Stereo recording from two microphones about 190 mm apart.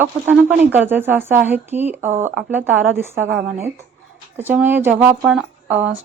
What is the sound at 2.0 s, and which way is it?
Speech, 40° right (ahead or behind).